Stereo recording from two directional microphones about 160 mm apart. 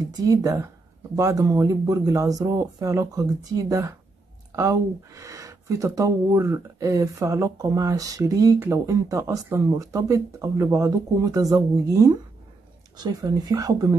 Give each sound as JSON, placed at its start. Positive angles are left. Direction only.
{"t": 0.0, "sound": "speech", "side_deg": -20}